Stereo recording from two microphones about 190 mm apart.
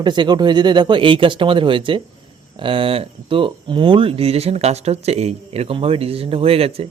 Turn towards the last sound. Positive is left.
turn(degrees=-30)  # may be behind; listen again after turning